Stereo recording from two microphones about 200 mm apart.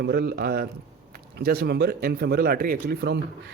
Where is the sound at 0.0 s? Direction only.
55° right (ahead or behind).